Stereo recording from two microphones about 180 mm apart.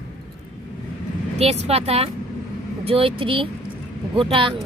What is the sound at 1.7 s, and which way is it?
A woman's voice, 35° right (ahead or behind).